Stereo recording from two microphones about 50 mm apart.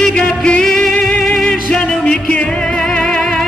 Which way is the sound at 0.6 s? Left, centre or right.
Centre.